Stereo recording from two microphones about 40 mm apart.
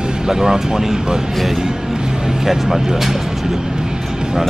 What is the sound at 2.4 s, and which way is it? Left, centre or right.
Speech, centre.